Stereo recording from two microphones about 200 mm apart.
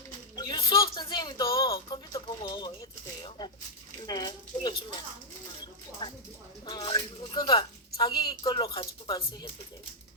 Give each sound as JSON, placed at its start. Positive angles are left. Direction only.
{"t": 0.3, "sound": "a sound", "side_deg": 20}
{"t": 3.2, "sound": "keys jangling", "side_deg": 20}
{"t": 4.0, "sound": "a woman's voice", "side_deg": 20}